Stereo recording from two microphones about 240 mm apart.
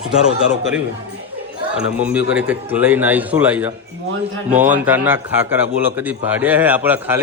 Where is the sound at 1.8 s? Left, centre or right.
Centre.